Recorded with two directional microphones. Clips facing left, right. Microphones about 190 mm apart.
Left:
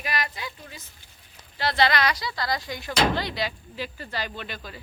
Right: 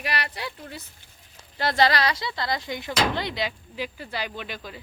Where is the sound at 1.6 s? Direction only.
45° right (ahead or behind); by 4.8 s 15° right (ahead or behind).